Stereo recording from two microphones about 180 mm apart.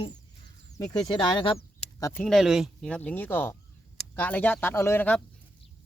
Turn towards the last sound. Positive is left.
turn(degrees=10)  # may be behind; listen again after turning